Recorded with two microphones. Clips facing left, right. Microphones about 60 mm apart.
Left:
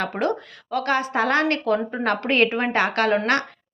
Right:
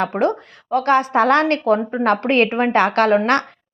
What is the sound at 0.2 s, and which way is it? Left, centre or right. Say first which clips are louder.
A woman's voice: right 5 dB; right.